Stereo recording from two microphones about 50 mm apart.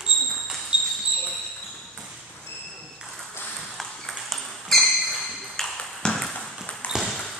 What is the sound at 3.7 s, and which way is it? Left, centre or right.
Ping, centre.